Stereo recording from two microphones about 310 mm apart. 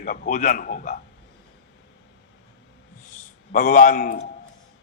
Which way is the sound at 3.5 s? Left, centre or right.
Left.